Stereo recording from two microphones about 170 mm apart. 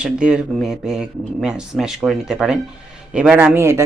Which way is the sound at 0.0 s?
5° right (ahead or behind).